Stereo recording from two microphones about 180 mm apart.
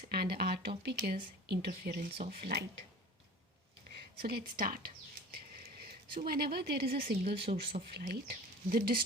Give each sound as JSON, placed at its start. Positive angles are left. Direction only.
{"t": 0.1, "sound": "a sound", "side_deg": -60}
{"t": 0.8, "sound": "speech", "side_deg": -60}
{"t": 3.9, "sound": "speech", "side_deg": -60}
{"t": 6.2, "sound": "speech", "side_deg": -55}